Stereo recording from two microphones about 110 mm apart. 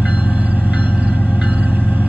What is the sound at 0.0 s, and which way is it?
Music, 10° right (ahead or behind).